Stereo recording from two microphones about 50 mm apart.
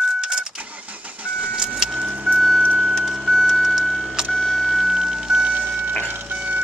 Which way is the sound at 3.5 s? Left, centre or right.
Centre.